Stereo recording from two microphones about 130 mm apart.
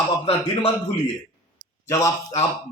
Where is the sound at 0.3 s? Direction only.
50° left (ahead or behind).